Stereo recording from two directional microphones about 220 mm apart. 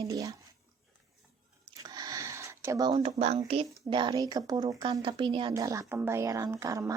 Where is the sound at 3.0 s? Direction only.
30° right (ahead or behind).